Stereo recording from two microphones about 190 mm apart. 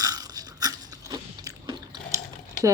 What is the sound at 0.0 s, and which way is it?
Biting, 20° right (ahead or behind).